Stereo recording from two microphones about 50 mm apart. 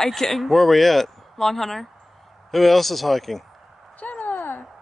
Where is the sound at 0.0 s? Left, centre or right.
Centre.